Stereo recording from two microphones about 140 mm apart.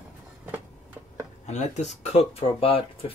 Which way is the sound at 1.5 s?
55° left (ahead or behind).